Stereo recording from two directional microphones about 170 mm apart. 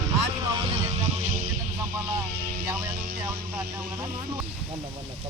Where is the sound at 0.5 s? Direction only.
30° right (ahead or behind).